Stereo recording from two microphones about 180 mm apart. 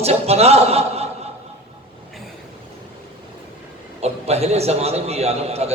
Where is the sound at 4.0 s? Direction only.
35° right (ahead or behind).